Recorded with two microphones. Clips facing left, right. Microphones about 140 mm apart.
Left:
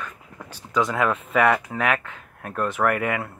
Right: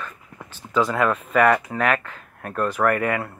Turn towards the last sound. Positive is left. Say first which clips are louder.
# right 2 dB
turn(degrees=10)  # may be behind; listen again after turning